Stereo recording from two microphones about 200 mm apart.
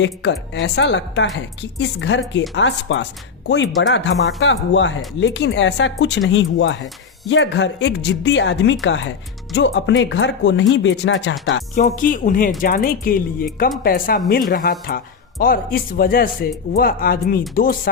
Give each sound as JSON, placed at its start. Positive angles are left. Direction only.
{"t": 0.0, "sound": "speech", "side_deg": 60}
{"t": 11.7, "sound": "speech", "side_deg": 40}